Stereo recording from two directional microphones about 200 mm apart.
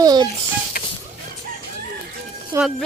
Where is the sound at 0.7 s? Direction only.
45° left (ahead or behind).